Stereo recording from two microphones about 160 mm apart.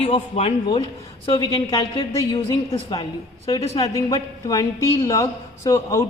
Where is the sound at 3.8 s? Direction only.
20° left (ahead or behind).